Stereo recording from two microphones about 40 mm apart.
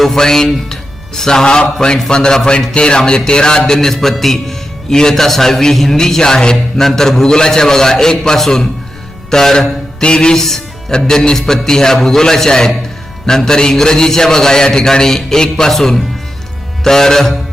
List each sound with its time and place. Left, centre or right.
0.0 s speech: centre
9.3 s mantra: centre
10.4 s music: centre
10.9 s speech: centre